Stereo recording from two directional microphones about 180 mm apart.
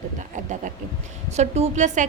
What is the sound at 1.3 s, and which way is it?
Speech, 40° right (ahead or behind).